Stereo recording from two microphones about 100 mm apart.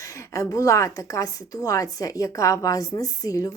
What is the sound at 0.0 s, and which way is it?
A woman's voice, 35° left (ahead or behind).